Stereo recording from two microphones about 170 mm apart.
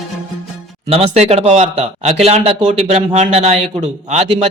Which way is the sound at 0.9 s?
35° right (ahead or behind).